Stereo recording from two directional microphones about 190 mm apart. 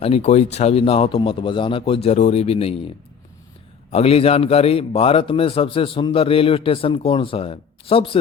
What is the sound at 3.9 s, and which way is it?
A man's voice, 30° left (ahead or behind).